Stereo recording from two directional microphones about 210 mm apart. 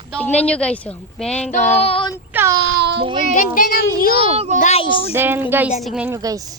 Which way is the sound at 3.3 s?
40° left (ahead or behind).